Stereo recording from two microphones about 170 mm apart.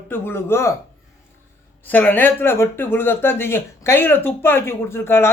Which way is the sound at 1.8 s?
10° left (ahead or behind).